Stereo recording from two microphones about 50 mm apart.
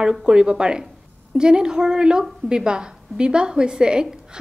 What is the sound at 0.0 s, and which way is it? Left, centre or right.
A woman's voice, centre.